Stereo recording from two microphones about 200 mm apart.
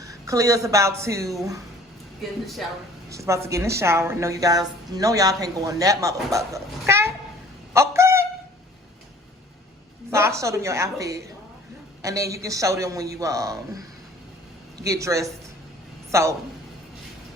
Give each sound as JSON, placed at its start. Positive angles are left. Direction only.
{"t": 0.0, "sound": "a woman's voice", "side_deg": -15}
{"t": 3.1, "sound": "a woman's voice", "side_deg": -15}
{"t": 7.7, "sound": "a sound", "side_deg": -15}
{"t": 10.1, "sound": "a woman's voice", "side_deg": -15}
{"t": 14.8, "sound": "a woman's voice", "side_deg": -15}